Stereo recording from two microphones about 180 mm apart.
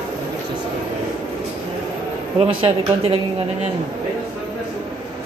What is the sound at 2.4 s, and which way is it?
Speech, 30° right (ahead or behind).